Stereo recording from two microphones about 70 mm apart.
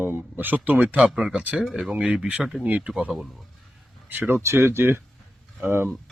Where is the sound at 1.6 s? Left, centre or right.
Centre; by 2.9 s right.